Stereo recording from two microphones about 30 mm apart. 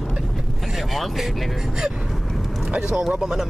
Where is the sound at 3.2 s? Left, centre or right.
Right.